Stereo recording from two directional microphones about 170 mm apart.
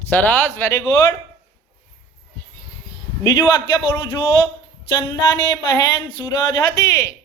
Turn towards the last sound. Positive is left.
turn(degrees=15)  # may be behind; listen again after turning